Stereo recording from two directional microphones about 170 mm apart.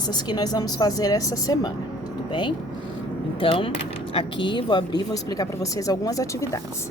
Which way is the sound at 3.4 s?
30° left (ahead or behind).